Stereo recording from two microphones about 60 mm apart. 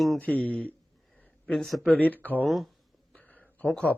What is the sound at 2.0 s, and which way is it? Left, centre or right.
Speech, left.